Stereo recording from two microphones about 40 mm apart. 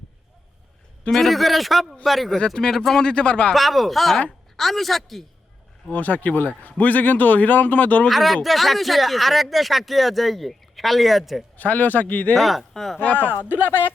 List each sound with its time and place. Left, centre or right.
1.1 s speech: centre
2.6 s speech: centre
3.5 s speech: centre
5.9 s a man's voice: left
8.0 s speech: centre
11.5 s a man's voice: left
12.4 s speech: centre
13.0 s speech: left